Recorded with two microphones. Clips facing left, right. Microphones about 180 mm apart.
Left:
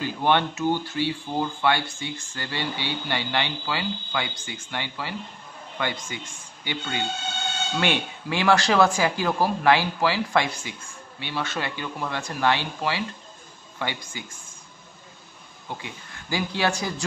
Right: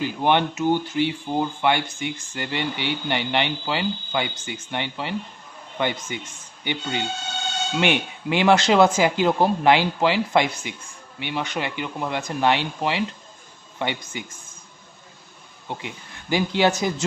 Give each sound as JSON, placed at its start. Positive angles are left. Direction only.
{"t": 0.0, "sound": "a man's voice", "side_deg": -15}
{"t": 15.8, "sound": "speech", "side_deg": -20}